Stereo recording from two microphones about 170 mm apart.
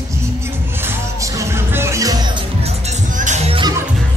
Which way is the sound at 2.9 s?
45° right (ahead or behind).